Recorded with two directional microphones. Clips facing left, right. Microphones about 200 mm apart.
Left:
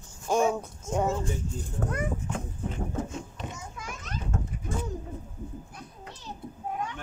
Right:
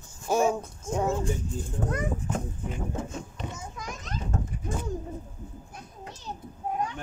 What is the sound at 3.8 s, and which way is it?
Children playing, 35° right (ahead or behind).